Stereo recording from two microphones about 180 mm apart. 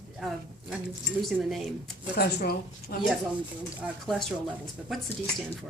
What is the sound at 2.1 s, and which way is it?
Speech, 60° left (ahead or behind).